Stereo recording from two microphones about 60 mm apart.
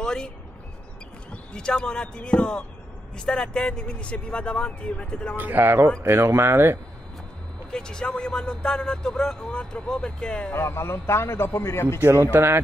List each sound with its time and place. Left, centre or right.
0.0 s a sound: centre
1.3 s speech: centre
5.4 s speech: right
6.0 s speech: right
7.7 s speech: centre
10.5 s a man's voice: left
12.1 s a man's voice: right